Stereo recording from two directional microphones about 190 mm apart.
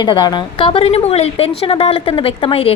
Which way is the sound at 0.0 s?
20° left (ahead or behind).